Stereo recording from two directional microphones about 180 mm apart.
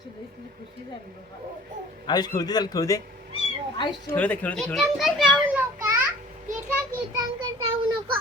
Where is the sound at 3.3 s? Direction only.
30° right (ahead or behind).